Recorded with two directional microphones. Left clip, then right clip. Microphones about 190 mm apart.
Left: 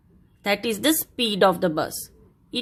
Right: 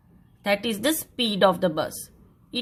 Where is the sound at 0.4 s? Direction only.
20° left (ahead or behind).